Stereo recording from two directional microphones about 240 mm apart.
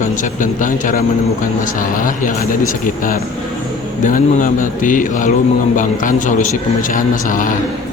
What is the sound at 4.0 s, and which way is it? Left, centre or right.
Speech, left.